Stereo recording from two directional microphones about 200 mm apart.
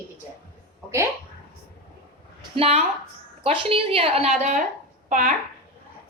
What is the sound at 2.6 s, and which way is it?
A woman's voice, 30° right (ahead or behind).